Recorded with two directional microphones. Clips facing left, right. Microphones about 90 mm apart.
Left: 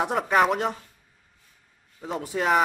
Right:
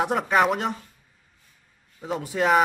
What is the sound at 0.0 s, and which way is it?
Speech, 5° right (ahead or behind).